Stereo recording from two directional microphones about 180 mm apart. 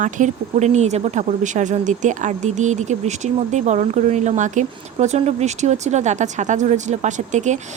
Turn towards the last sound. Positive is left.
turn(degrees=-40)  # may be behind; listen again after turning